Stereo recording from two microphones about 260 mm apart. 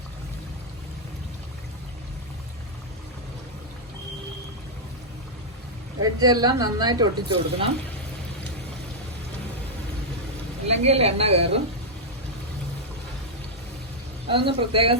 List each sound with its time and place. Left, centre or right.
6.0 s a woman's voice: centre
10.7 s a woman's voice: right
14.3 s a woman's voice: centre